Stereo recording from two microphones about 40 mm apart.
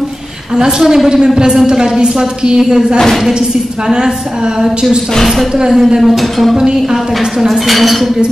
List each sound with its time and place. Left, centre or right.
0.6 s a woman's voice: centre
5.9 s speech: centre
6.5 s a woman's voice: centre
7.3 s speech: centre